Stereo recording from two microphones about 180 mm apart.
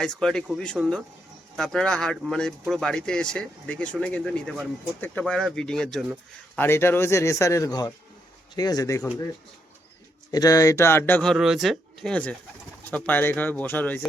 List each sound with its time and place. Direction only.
0.0 s speech: 5° left (ahead or behind)
6.6 s speech: 15° left (ahead or behind)
10.3 s speech: 20° left (ahead or behind)